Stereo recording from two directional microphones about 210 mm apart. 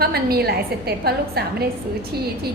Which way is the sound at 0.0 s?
50° right (ahead or behind).